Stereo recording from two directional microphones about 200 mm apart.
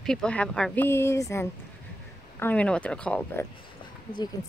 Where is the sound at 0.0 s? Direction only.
5° left (ahead or behind).